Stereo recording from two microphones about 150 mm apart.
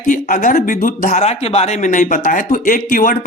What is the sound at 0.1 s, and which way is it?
Speech, 60° left (ahead or behind).